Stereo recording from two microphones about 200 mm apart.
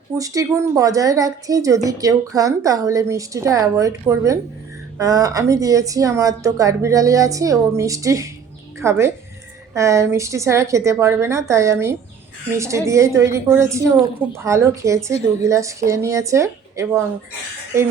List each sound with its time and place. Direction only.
0.2 s a woman's voice: 15° right (ahead or behind)